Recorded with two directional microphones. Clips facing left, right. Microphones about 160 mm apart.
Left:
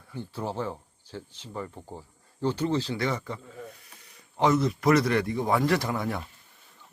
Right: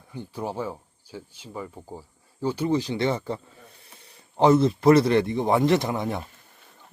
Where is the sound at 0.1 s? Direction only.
15° right (ahead or behind).